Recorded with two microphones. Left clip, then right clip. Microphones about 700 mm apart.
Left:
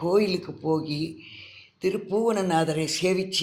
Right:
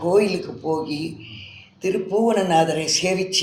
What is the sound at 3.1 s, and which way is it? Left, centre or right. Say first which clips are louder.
Speech: right 4 dB; left.